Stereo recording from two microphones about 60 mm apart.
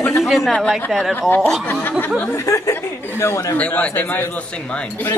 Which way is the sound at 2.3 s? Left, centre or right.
Left.